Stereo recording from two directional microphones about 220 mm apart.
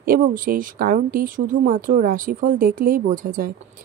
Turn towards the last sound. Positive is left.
turn(degrees=-40)  # may be behind; listen again after turning